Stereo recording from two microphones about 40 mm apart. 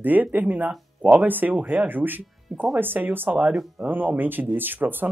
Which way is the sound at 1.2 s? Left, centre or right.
Right.